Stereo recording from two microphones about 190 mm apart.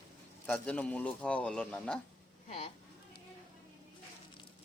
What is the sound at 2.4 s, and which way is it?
Speech, 35° left (ahead or behind).